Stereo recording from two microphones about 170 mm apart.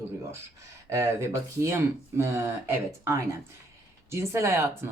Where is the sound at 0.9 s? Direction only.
15° right (ahead or behind).